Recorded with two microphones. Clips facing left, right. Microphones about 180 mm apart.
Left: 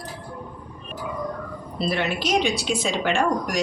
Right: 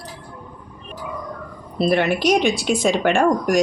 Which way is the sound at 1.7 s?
55° right (ahead or behind).